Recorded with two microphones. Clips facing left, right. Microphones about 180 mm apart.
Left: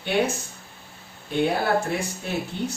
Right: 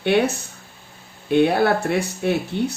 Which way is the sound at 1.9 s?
65° right (ahead or behind).